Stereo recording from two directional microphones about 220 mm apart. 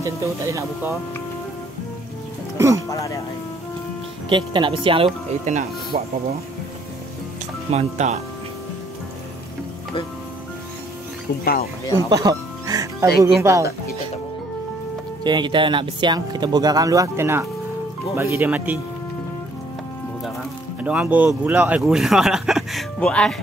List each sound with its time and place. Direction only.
0.0 s speech: 15° right (ahead or behind)
2.5 s speech: 15° right (ahead or behind)
2.9 s speech: 15° left (ahead or behind)
4.3 s speech: 20° right (ahead or behind)
7.7 s speech: 30° right (ahead or behind)
12.1 s music: 15° right (ahead or behind)
13.2 s speech: 15° right (ahead or behind)
15.2 s speech: 20° right (ahead or behind)
20.8 s speech: 5° right (ahead or behind)